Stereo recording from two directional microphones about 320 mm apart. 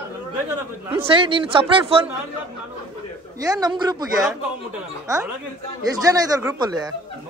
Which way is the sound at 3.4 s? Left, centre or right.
Centre.